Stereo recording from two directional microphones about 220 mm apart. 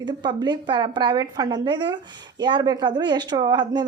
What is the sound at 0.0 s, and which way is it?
A woman's voice, 20° right (ahead or behind).